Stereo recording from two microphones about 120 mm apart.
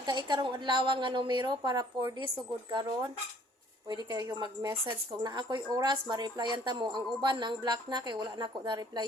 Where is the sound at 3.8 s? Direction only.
35° right (ahead or behind).